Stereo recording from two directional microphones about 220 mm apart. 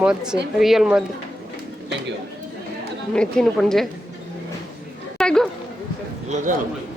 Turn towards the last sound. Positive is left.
turn(degrees=-35)  # may be behind; listen again after turning